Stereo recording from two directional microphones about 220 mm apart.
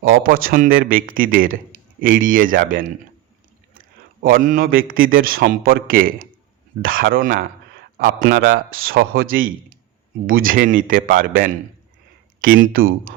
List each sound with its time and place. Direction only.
0.2 s a man's voice: 40° right (ahead or behind)